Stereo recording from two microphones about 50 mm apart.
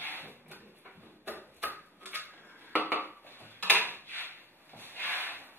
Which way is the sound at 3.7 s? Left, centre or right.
Left.